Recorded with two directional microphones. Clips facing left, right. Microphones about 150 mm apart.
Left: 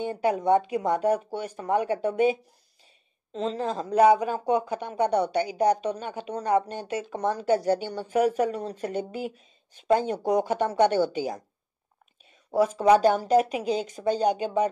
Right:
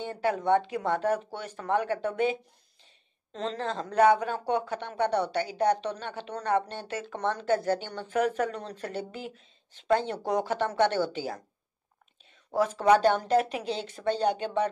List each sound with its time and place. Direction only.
0.0 s a woman's voice: 15° left (ahead or behind)
3.3 s a woman's voice: 10° left (ahead or behind)
12.5 s a woman's voice: 10° left (ahead or behind)